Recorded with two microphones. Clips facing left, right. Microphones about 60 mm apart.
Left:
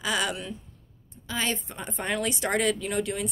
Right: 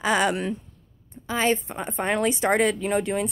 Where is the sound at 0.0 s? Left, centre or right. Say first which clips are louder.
Right 6 dB; right.